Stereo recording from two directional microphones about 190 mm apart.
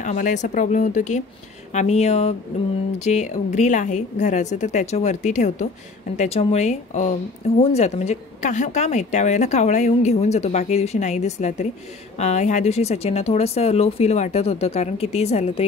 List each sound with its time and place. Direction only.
0.0 s a woman's voice: 40° left (ahead or behind)